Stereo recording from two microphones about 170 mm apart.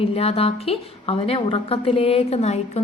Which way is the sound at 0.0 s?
35° left (ahead or behind).